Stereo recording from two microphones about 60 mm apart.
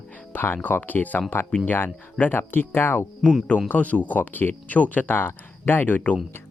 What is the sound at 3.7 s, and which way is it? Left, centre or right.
Speech, left.